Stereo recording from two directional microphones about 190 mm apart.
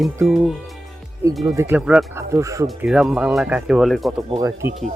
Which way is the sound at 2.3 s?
15° right (ahead or behind).